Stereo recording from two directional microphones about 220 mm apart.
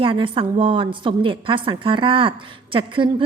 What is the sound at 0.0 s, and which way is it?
A woman's voice, 25° right (ahead or behind).